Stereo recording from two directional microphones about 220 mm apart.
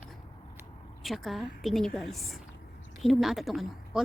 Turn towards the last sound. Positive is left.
turn(degrees=0)  # may be behind; listen again after turning